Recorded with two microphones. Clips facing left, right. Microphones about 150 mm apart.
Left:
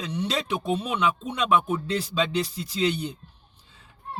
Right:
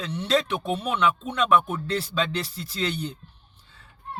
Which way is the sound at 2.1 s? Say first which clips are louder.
Left 2 dB; 15° left (ahead or behind).